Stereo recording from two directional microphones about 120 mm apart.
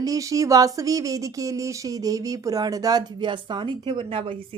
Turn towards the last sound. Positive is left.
turn(degrees=-50)  # may be behind; listen again after turning